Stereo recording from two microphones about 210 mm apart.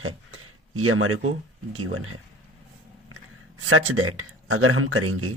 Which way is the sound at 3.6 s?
80° right.